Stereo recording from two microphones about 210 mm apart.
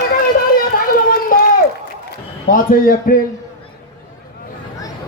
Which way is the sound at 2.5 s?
40° left (ahead or behind).